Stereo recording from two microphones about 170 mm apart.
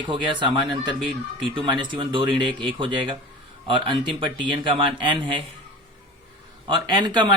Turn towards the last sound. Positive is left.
turn(degrees=-25)  # may be behind; listen again after turning